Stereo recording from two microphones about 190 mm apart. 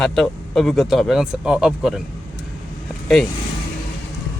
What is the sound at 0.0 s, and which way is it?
A man's voice, centre (ahead or behind).